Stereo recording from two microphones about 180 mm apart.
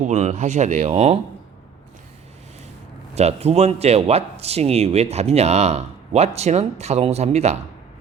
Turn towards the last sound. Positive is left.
turn(degrees=-35)  # may be behind; listen again after turning